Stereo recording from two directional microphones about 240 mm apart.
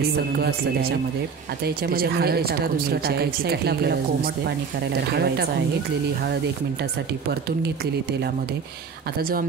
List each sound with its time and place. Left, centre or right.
0.1 s speech: right